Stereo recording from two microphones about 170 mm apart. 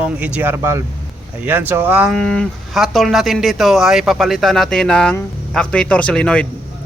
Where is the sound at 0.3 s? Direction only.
15° right (ahead or behind).